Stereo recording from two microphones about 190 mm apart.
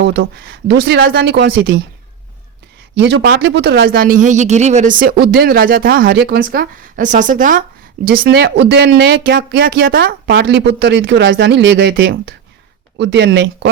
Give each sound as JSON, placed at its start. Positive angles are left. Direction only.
{"t": 0.0, "sound": "speech", "side_deg": -55}
{"t": 2.9, "sound": "speech", "side_deg": -65}
{"t": 10.8, "sound": "speech", "side_deg": -70}